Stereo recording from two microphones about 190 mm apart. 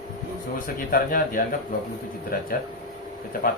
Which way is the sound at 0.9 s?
50° left (ahead or behind).